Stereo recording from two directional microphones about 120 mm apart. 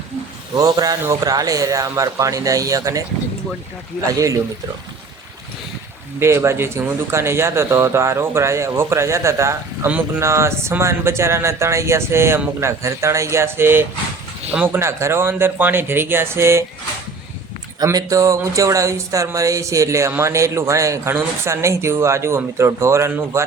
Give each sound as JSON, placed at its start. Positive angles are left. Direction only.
{"t": 0.5, "sound": "speech", "side_deg": -30}
{"t": 4.0, "sound": "speech", "side_deg": -25}
{"t": 6.1, "sound": "speech", "side_deg": -20}
{"t": 17.8, "sound": "speech", "side_deg": -30}